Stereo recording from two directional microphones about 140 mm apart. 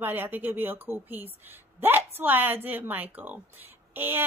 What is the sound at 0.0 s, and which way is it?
A woman's voice, 15° right (ahead or behind).